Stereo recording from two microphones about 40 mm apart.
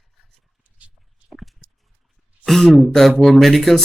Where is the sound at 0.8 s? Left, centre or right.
Right.